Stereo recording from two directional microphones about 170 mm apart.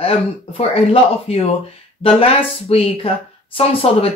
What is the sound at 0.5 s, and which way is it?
Speech, 35° left (ahead or behind).